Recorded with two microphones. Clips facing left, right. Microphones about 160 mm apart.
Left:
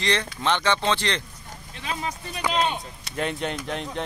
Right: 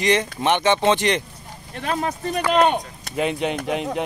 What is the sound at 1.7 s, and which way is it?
Speech, 55° right (ahead or behind).